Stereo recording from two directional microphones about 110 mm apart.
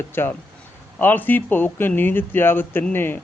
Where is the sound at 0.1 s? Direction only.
20° left (ahead or behind).